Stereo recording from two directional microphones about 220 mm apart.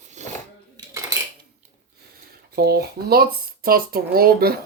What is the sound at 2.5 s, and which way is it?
Speech, 45° right (ahead or behind).